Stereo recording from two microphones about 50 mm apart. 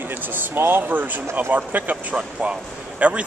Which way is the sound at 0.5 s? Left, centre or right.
Right.